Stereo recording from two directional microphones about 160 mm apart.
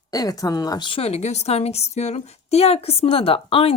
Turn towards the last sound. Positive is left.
turn(degrees=35)  # may be behind; listen again after turning